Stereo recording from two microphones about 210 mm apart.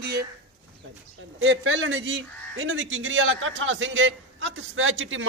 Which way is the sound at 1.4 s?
65° right (ahead or behind).